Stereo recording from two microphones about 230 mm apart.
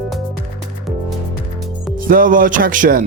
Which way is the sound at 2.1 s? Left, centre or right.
Right.